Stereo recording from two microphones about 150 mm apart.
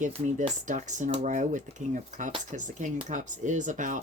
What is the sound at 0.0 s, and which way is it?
Speech, 50° right (ahead or behind).